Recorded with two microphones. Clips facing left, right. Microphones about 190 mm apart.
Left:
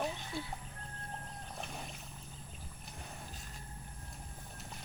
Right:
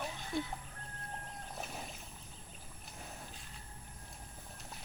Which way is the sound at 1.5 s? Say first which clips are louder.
Even; 5° right (ahead or behind).